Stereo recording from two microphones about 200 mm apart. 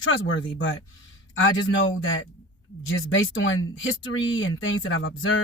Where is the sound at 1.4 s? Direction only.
75° left (ahead or behind).